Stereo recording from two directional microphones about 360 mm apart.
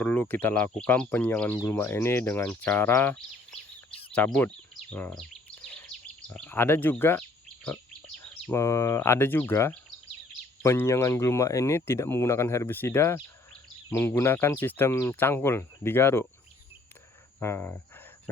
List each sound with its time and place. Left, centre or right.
0.0 s speech: centre
4.1 s bird vocalization: centre
6.3 s speech: centre
17.4 s speech: centre